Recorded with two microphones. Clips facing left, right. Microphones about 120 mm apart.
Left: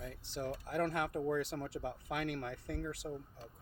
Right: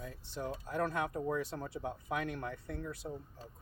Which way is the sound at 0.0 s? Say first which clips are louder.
Even; 70° left (ahead or behind).